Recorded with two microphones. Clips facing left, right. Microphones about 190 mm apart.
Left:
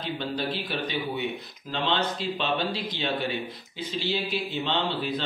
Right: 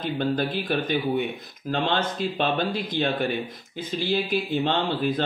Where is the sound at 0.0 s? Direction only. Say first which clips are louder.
Right 5 dB; 50° right (ahead or behind).